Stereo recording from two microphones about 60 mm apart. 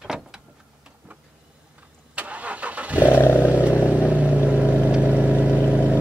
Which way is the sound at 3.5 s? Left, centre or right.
Right.